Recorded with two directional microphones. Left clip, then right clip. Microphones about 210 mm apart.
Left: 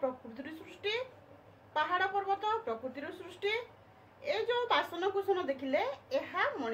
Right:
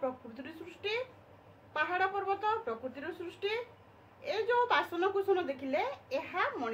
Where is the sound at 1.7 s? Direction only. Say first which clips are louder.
Even; 25° right (ahead or behind).